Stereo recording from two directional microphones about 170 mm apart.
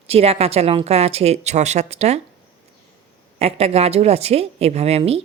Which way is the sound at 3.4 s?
35° right (ahead or behind).